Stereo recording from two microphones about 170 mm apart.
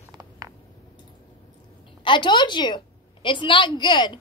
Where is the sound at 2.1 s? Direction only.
25° left (ahead or behind).